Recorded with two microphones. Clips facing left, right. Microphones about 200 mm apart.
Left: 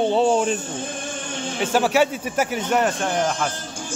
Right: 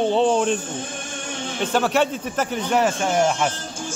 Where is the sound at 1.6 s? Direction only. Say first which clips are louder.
Left 1 dB; 10° left (ahead or behind).